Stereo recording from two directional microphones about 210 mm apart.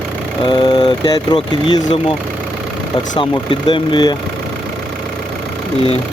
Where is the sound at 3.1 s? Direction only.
25° left (ahead or behind).